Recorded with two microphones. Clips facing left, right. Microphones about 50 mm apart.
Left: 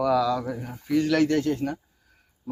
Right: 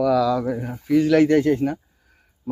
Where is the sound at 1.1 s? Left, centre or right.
Right.